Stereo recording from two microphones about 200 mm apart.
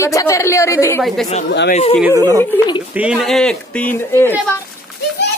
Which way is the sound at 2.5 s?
20° left (ahead or behind).